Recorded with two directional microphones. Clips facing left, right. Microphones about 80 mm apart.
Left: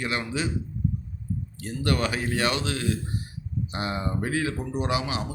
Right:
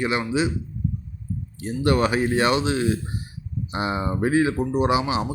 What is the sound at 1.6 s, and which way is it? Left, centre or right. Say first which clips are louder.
A man's voice: right 6 dB; right.